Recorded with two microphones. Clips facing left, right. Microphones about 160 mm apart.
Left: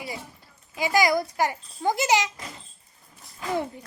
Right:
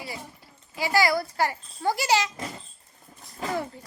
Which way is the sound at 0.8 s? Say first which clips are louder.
Left 1 dB; 20° left (ahead or behind).